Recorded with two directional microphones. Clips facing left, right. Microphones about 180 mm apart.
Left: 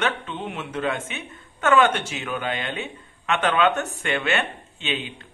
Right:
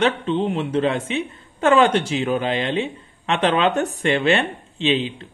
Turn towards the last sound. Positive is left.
turn(degrees=-30)  # may be behind; listen again after turning